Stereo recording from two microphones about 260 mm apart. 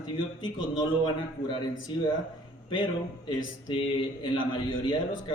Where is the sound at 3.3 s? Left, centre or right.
Centre.